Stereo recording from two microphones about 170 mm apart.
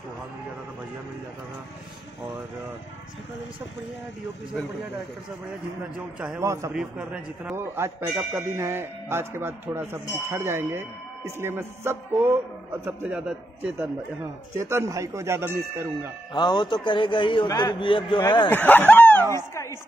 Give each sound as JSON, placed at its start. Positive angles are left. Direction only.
{"t": 5.9, "sound": "speech", "side_deg": -5}
{"t": 6.4, "sound": "speech", "side_deg": -15}
{"t": 6.7, "sound": "speech", "side_deg": -5}
{"t": 14.6, "sound": "speech", "side_deg": -15}
{"t": 16.3, "sound": "a man's voice", "side_deg": 25}
{"t": 18.5, "sound": "speech", "side_deg": 10}